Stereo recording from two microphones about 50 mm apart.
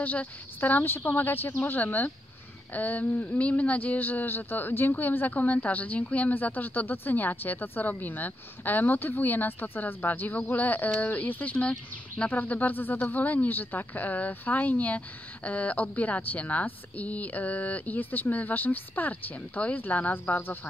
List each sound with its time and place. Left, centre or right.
0.0 s speech: left
0.6 s a woman's voice: left